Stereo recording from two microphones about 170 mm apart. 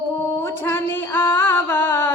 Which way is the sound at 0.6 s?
15° left (ahead or behind).